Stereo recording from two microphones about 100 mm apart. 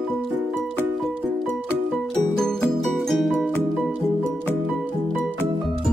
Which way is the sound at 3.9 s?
15° right (ahead or behind).